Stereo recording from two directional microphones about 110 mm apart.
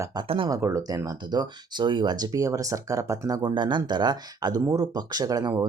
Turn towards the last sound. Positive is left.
turn(degrees=-35)  # may be behind; listen again after turning